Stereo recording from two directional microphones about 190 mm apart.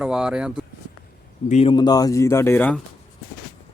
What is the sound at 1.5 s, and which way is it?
Speech, 30° left (ahead or behind).